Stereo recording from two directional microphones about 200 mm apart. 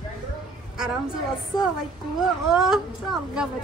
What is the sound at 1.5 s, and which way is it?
Speech, 20° left (ahead or behind).